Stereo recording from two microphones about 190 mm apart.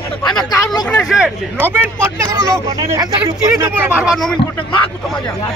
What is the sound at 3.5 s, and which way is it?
Speech, 10° right (ahead or behind).